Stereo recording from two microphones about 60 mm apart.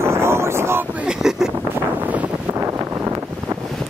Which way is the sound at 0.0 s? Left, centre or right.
Right.